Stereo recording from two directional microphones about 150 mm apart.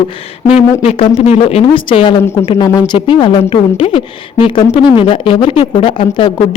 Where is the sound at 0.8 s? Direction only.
45° left (ahead or behind).